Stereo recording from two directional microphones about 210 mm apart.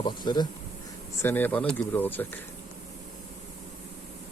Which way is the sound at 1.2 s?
10° left (ahead or behind).